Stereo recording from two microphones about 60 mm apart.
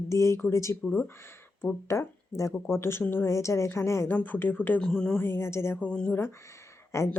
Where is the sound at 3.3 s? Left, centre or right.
Left.